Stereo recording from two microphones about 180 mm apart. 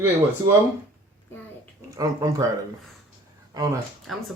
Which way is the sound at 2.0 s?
20° right (ahead or behind).